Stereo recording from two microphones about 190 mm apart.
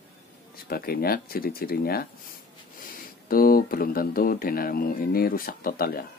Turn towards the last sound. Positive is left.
turn(degrees=50)  # may be behind; listen again after turning